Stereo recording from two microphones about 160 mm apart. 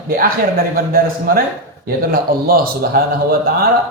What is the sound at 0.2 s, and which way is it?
Speech, 65° right (ahead or behind).